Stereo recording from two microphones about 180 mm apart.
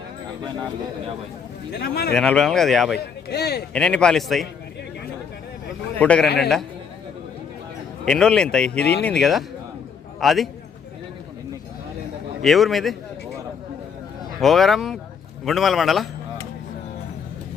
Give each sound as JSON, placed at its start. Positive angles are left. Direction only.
{"t": 1.8, "sound": "speech", "side_deg": 60}
{"t": 2.1, "sound": "speech", "side_deg": 5}
{"t": 3.0, "sound": "speech", "side_deg": 65}
{"t": 3.7, "sound": "speech", "side_deg": 5}
{"t": 6.0, "sound": "a man's voice", "side_deg": 5}
{"t": 6.2, "sound": "speech", "side_deg": 65}
{"t": 8.0, "sound": "speech", "side_deg": 5}
{"t": 12.4, "sound": "speech", "side_deg": 0}
{"t": 14.4, "sound": "speech", "side_deg": 0}